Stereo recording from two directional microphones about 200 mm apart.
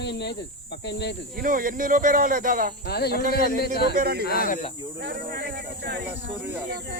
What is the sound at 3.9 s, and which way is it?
Speech, 50° right (ahead or behind).